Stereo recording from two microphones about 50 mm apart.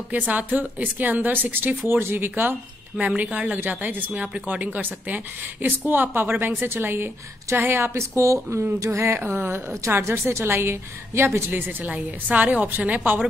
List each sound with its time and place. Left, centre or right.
0.1 s a woman's voice: right
2.9 s a woman's voice: right
3.5 s a woman's voice: right
8.0 s a woman's voice: right
9.2 s speech: right
9.8 s a woman's voice: right
11.5 s a woman's voice: right